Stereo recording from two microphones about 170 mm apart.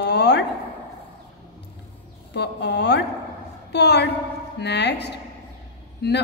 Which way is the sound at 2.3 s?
90° left.